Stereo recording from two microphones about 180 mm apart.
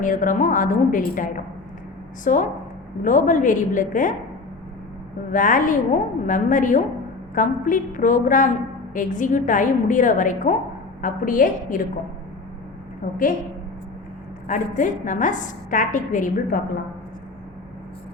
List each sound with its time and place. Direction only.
0.0 s a woman's voice: 45° left (ahead or behind)
5.3 s a woman's voice: 45° left (ahead or behind)
13.0 s a woman's voice: 45° left (ahead or behind)
14.4 s a woman's voice: 45° left (ahead or behind)